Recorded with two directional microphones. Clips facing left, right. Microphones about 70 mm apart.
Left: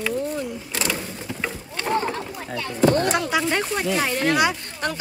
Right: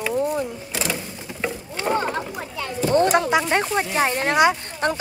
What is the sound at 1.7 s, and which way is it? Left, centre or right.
Speech, centre.